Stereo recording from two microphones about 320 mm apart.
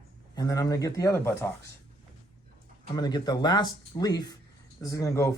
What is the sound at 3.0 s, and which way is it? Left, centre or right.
Speech, centre.